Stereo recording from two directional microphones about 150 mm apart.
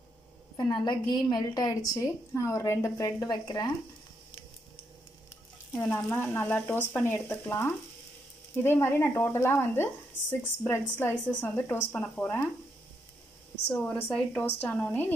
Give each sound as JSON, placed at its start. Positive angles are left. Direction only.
{"t": 0.6, "sound": "a woman's voice", "side_deg": 25}
{"t": 5.9, "sound": "speech", "side_deg": 15}
{"t": 13.7, "sound": "speech", "side_deg": 10}